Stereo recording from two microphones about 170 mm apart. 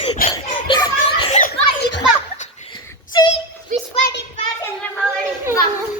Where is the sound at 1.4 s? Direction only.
60° left (ahead or behind).